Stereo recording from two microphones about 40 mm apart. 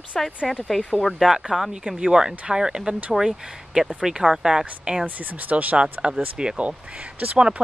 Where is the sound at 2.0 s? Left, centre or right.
Centre.